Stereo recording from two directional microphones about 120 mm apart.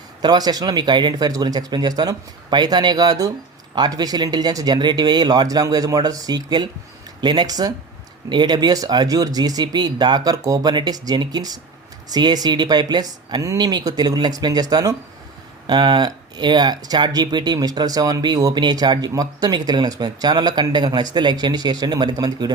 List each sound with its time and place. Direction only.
0.2 s speech: 35° right (ahead or behind)